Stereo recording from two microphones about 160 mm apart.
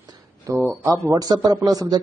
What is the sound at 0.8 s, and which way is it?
A man's voice, 20° right (ahead or behind).